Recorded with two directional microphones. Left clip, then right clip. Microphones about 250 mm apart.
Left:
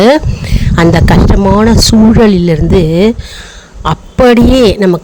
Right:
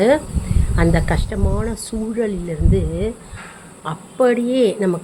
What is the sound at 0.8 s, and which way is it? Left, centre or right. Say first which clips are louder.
Speech: left 12 dB; left.